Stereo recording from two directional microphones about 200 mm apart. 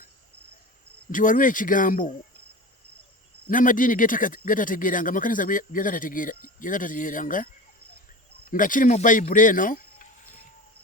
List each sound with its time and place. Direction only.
1.1 s speech: 40° left (ahead or behind)
3.5 s speech: 40° left (ahead or behind)